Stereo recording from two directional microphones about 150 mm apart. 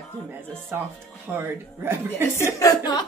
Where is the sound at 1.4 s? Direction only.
15° right (ahead or behind).